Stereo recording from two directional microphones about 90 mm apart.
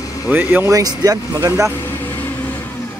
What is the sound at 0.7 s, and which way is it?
Speech, 45° right (ahead or behind).